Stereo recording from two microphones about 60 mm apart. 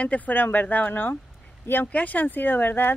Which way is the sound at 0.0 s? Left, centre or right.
Left.